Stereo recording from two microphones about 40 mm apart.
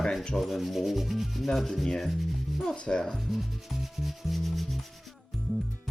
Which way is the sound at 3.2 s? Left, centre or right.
Centre.